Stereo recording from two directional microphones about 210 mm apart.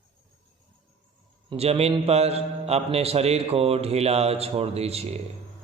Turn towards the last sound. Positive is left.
turn(degrees=-30)  # may be behind; listen again after turning